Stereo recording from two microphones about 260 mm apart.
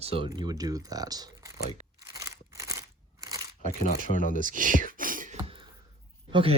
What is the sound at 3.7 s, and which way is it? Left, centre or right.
Speech, left.